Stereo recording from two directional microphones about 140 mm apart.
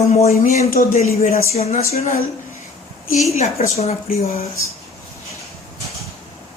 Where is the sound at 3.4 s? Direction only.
50° left (ahead or behind).